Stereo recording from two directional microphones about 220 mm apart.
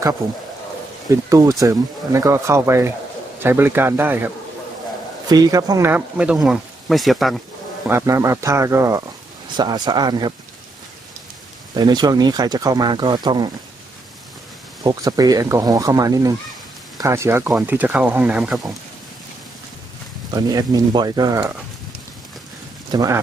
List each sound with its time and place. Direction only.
0.2 s speech: 15° right (ahead or behind)
5.3 s speech: 15° right (ahead or behind); by 7.3 s centre (ahead or behind)
7.9 s speech: 15° right (ahead or behind)
11.7 s speech: 20° right (ahead or behind)
14.8 s speech: 15° right (ahead or behind); by 18.8 s centre (ahead or behind)
20.5 s speech: 20° right (ahead or behind)
22.8 s speech: 15° right (ahead or behind)